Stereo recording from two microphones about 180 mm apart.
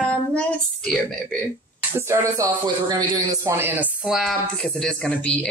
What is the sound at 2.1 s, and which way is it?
Speech, 15° right (ahead or behind).